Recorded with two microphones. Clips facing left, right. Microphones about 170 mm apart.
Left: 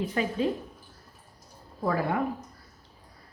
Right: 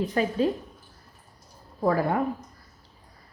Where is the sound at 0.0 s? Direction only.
40° right (ahead or behind).